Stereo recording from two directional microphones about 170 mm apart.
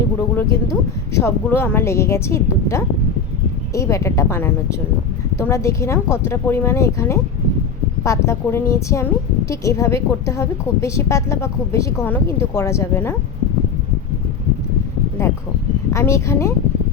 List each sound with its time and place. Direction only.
0.3 s a woman's voice: 15° left (ahead or behind)
15.9 s a woman's voice: 15° left (ahead or behind)